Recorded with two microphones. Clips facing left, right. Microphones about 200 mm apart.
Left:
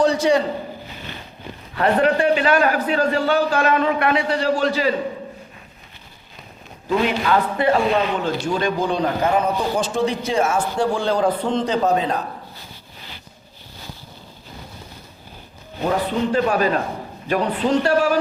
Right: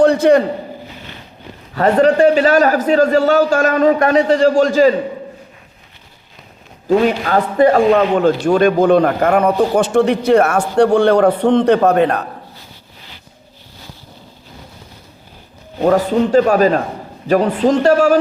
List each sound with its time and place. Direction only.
0.0 s a man's voice: 55° right (ahead or behind)
1.7 s a man's voice: 40° right (ahead or behind)
6.8 s a man's voice: 45° right (ahead or behind); by 12.2 s 65° right (ahead or behind)
15.8 s a man's voice: 45° right (ahead or behind)